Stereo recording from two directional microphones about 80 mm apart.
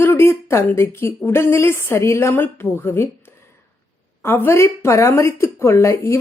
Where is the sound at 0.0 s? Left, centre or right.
Left.